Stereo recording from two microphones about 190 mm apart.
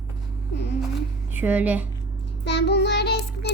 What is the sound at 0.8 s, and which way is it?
Music, 5° right (ahead or behind).